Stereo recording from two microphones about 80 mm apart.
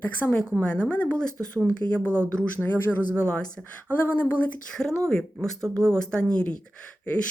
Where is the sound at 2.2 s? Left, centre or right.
Left.